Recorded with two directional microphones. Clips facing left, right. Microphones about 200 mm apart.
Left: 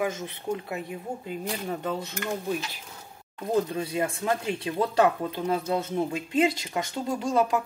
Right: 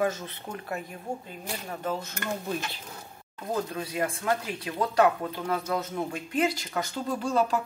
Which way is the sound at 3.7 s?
25° left (ahead or behind).